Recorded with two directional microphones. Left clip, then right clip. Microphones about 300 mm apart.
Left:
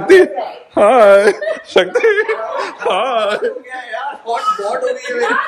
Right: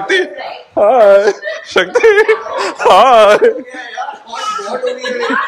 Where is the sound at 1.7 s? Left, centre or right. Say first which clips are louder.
Right 4 dB; centre.